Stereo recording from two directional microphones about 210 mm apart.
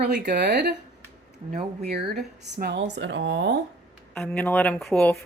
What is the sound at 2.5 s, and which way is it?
Speech, 55° right (ahead or behind).